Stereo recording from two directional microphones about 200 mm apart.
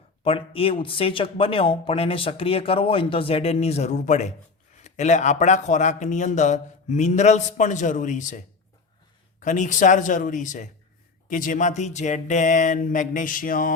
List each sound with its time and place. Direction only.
0.3 s a man's voice: 30° left (ahead or behind)
9.4 s a man's voice: 40° left (ahead or behind)